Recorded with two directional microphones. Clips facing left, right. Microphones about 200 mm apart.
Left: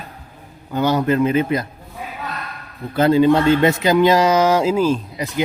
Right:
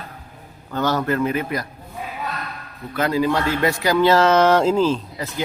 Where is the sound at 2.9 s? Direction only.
30° left (ahead or behind).